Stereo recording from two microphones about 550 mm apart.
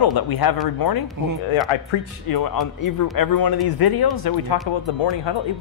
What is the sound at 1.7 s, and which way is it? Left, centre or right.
Speech, left.